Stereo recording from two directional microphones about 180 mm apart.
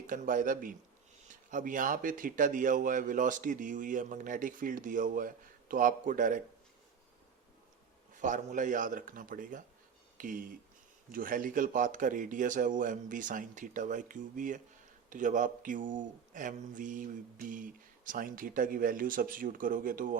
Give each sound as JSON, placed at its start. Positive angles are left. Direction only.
{"t": 0.1, "sound": "speech", "side_deg": -50}
{"t": 8.1, "sound": "speech", "side_deg": -45}